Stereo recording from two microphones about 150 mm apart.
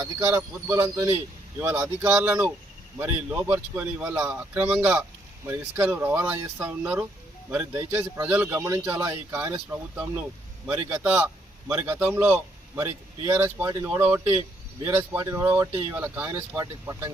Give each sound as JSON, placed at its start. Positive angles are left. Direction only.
{"t": 0.0, "sound": "a man's voice", "side_deg": -20}